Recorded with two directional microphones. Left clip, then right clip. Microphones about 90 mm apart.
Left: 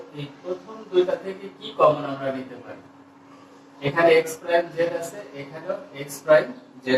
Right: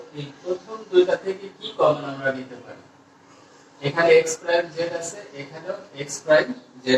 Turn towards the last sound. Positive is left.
turn(degrees=-35)  # may be behind; listen again after turning